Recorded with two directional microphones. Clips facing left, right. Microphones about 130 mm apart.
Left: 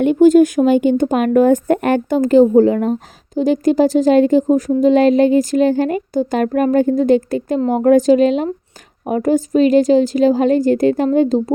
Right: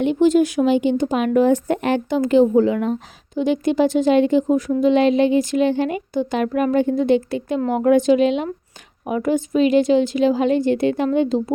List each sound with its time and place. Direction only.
0.0 s a woman's voice: 50° left (ahead or behind)